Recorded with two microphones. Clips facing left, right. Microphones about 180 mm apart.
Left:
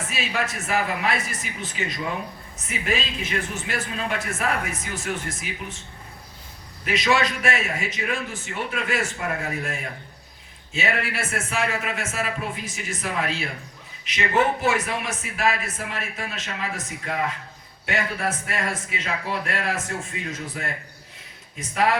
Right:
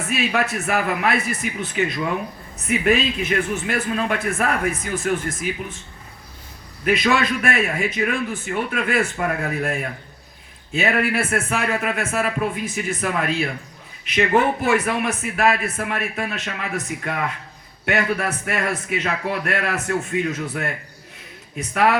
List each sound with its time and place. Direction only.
0.1 s a man's voice: 60° right (ahead or behind)
6.8 s a man's voice: 55° right (ahead or behind)
21.6 s a man's voice: 65° right (ahead or behind)